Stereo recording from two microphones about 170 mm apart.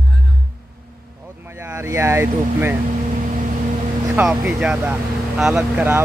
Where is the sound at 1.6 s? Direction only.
15° right (ahead or behind).